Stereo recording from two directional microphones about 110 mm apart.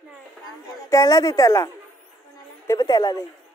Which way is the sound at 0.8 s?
30° left (ahead or behind).